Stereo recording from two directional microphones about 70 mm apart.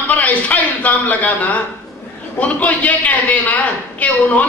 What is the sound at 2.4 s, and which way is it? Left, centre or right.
A woman's voice, left.